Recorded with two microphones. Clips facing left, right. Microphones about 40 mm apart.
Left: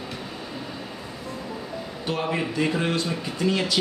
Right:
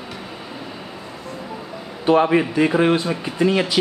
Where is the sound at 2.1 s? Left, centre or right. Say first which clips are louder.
Right 11 dB; right.